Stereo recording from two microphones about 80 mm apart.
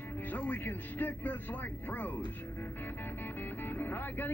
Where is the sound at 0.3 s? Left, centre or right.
Left.